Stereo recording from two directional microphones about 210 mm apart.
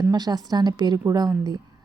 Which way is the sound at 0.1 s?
20° right (ahead or behind).